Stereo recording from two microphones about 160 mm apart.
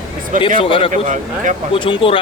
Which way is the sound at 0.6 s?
35° left (ahead or behind).